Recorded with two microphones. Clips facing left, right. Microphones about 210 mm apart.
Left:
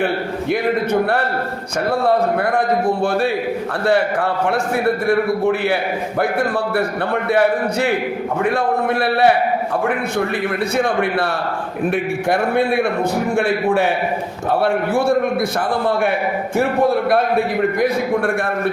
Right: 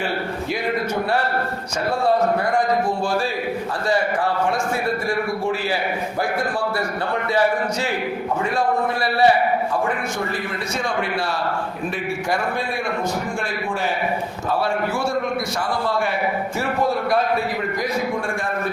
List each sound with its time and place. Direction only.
5.0 s a man's voice: 60° left (ahead or behind)
7.3 s a man's voice: 60° left (ahead or behind)
10.8 s a man's voice: 60° left (ahead or behind)
12.3 s a man's voice: 60° left (ahead or behind)